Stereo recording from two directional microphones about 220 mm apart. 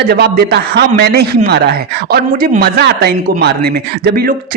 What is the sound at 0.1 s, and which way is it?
Speech, 45° right (ahead or behind).